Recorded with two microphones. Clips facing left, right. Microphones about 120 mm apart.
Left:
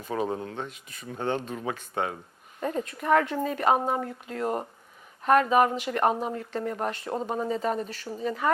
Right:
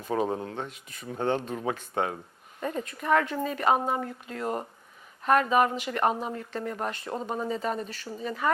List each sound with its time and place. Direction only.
0.2 s speech: 25° right (ahead or behind)
2.6 s speech: 25° left (ahead or behind)
6.0 s speech: 25° left (ahead or behind)